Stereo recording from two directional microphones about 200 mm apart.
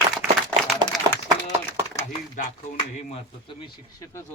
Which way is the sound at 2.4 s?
35° left (ahead or behind).